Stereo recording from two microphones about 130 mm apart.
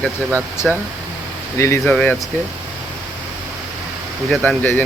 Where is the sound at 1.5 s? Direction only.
20° left (ahead or behind).